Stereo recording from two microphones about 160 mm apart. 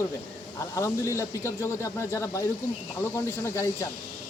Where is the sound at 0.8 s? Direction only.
20° left (ahead or behind).